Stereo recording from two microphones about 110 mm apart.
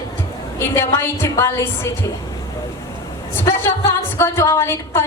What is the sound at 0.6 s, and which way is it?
A woman's voice, 25° left (ahead or behind).